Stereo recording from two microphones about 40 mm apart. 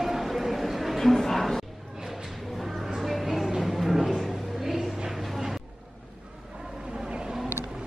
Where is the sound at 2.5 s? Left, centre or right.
Centre.